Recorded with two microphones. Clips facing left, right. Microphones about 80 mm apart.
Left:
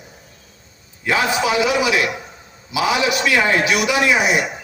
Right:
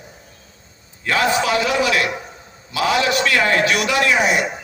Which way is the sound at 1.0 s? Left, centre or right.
Centre.